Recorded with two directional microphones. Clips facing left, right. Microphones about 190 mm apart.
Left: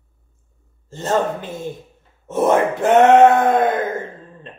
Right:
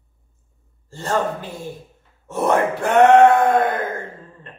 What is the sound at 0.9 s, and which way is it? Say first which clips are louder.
Speech: left 3 dB; 20° left (ahead or behind).